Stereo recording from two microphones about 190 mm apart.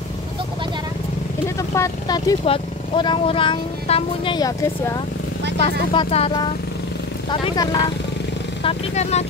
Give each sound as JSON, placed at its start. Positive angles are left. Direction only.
{"t": 1.6, "sound": "speech", "side_deg": 20}
{"t": 5.6, "sound": "speech", "side_deg": 30}
{"t": 8.6, "sound": "speech", "side_deg": 35}